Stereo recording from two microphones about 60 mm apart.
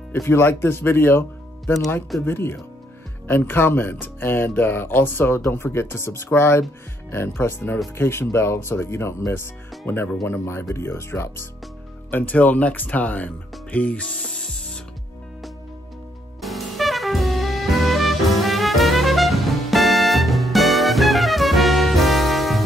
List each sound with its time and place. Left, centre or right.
0.1 s speech: left
12.1 s speech: left
14.2 s spray: centre
16.3 s music: centre